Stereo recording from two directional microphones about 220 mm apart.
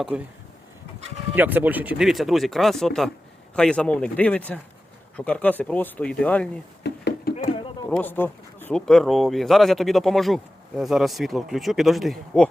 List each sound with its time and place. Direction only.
0.1 s speech: 5° right (ahead or behind)
1.4 s speech: 10° right (ahead or behind)
6.8 s a sound: 50° left (ahead or behind)
7.9 s speech: 5° left (ahead or behind)